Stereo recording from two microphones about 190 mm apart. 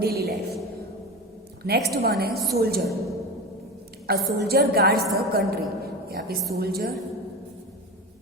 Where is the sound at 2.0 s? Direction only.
55° right (ahead or behind).